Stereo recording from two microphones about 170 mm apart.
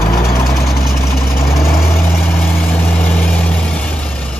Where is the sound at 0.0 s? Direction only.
15° left (ahead or behind).